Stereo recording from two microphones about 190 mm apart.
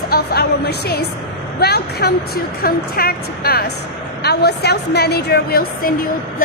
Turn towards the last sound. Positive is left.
turn(degrees=50)  # may be behind; listen again after turning